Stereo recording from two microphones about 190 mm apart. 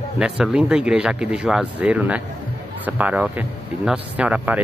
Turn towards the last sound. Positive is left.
turn(degrees=-5)  # may be behind; listen again after turning